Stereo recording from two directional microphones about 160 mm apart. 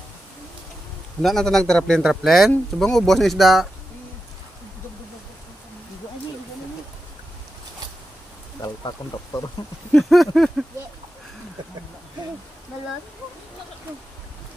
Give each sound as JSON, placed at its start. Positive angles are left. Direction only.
{"t": 1.2, "sound": "speech", "side_deg": 0}
{"t": 8.5, "sound": "speech", "side_deg": 25}
{"t": 9.9, "sound": "speech", "side_deg": 0}